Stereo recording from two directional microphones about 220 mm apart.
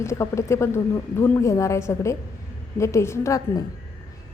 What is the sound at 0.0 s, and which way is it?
A woman's voice, 15° left (ahead or behind).